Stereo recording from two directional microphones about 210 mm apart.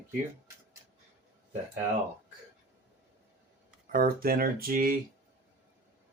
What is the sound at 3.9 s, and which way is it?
Speech, 40° right (ahead or behind).